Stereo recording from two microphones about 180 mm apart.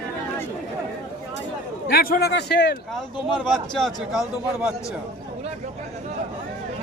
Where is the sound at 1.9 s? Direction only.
60° left (ahead or behind).